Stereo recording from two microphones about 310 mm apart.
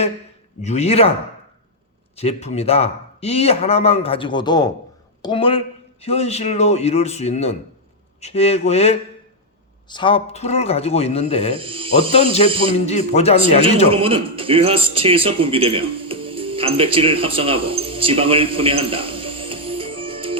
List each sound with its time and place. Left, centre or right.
0.6 s a man's voice: left
2.1 s a man's voice: centre
11.5 s speech: centre
12.1 s a man's voice: centre
13.9 s a man's voice: centre